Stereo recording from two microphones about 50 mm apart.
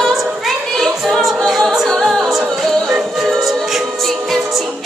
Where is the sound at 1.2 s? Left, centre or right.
Centre.